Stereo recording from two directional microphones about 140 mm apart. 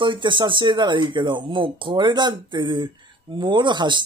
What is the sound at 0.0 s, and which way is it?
Speech, 35° right (ahead or behind).